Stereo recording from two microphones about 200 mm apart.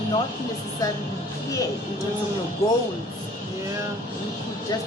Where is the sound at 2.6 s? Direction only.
15° left (ahead or behind).